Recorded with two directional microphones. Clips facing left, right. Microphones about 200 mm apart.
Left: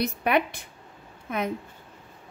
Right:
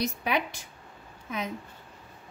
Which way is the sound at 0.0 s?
60° left (ahead or behind).